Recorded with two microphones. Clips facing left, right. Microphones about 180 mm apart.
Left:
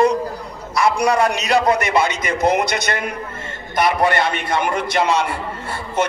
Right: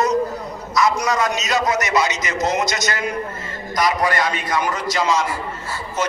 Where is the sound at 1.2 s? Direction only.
60° left (ahead or behind).